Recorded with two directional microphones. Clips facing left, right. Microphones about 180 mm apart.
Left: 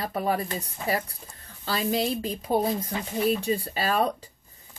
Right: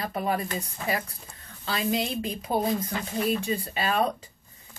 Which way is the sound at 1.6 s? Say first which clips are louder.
Left 2 dB; 35° left (ahead or behind).